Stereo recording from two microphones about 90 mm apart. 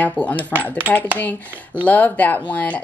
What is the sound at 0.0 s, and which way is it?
Speech, 20° left (ahead or behind).